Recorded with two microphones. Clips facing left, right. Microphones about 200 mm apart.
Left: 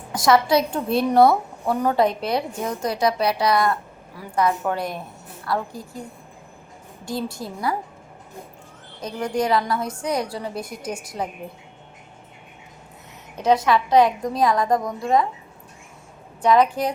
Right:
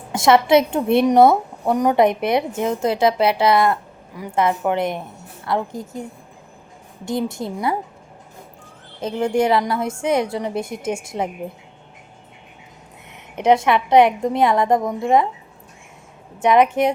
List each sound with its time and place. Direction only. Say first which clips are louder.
0.1 s a woman's voice: right 4 dB; 25° right (ahead or behind)
9.0 s a woman's voice: right 5 dB; 25° right (ahead or behind)
13.3 s a woman's voice: right 3 dB; 20° right (ahead or behind)
16.4 s a woman's voice: right 3 dB; 20° right (ahead or behind)